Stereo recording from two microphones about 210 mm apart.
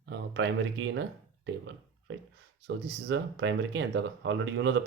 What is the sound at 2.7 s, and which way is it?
Speech, 60° right (ahead or behind).